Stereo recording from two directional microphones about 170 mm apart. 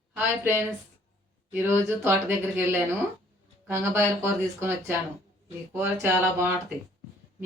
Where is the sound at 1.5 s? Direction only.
15° right (ahead or behind).